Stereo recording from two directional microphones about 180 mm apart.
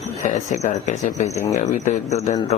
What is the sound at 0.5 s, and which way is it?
Speech, 40° left (ahead or behind).